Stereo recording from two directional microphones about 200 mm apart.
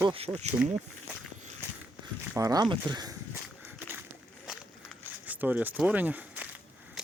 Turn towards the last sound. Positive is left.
turn(degrees=-10)  # may be behind; listen again after turning